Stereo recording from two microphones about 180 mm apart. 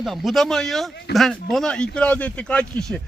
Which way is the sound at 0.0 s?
Centre (ahead or behind).